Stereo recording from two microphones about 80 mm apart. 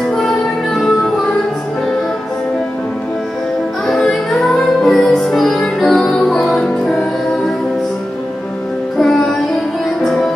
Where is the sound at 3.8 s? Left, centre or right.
Centre.